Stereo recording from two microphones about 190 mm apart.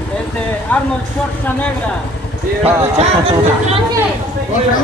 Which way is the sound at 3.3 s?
30° right (ahead or behind).